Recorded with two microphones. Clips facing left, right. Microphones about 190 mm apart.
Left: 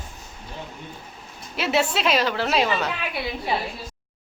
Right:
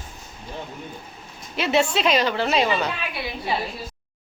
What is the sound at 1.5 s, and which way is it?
A woman's voice, 5° left (ahead or behind).